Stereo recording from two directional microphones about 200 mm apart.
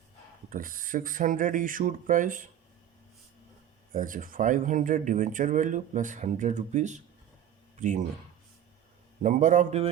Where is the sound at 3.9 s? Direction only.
40° right (ahead or behind).